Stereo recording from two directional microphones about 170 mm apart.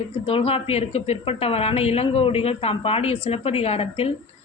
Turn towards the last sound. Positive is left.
turn(degrees=35)  # may be behind; listen again after turning